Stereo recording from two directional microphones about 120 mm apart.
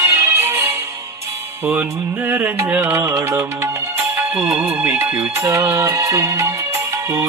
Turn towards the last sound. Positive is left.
turn(degrees=-25)  # may be behind; listen again after turning